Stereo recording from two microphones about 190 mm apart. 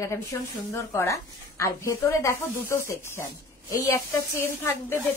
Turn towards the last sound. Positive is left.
turn(degrees=15)  # may be behind; listen again after turning